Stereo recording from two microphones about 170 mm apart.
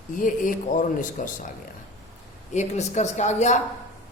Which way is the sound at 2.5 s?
45° left (ahead or behind).